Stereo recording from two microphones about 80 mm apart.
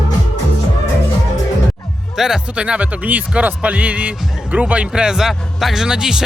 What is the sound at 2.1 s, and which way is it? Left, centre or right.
Speech, centre.